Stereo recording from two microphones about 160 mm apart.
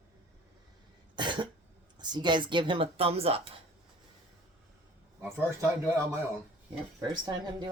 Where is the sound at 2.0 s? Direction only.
30° right (ahead or behind).